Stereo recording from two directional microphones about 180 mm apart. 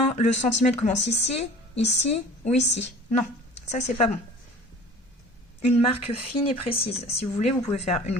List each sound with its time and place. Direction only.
0.2 s a woman's voice: 40° left (ahead or behind)
5.6 s a woman's voice: 35° left (ahead or behind)